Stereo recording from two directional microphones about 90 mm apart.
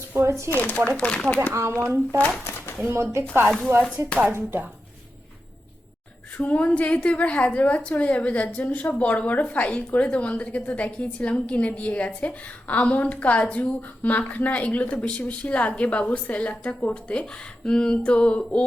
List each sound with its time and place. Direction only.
0.3 s speech: 30° right (ahead or behind)
0.5 s a woman's voice: 20° left (ahead or behind)
1.5 s speech: 30° right (ahead or behind)
6.3 s a woman's voice: 15° left (ahead or behind)